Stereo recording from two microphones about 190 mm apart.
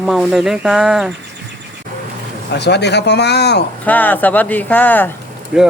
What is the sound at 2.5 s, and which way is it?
Speech, 60° left (ahead or behind).